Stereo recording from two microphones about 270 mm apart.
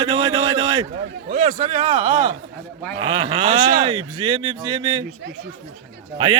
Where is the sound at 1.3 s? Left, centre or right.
Right.